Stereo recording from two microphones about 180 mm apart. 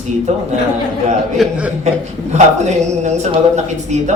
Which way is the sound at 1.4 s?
Centre (ahead or behind).